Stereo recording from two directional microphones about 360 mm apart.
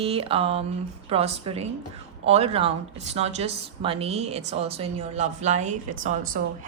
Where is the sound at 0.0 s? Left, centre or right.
Centre.